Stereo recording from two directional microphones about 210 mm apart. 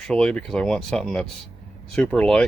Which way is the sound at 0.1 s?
5° left (ahead or behind).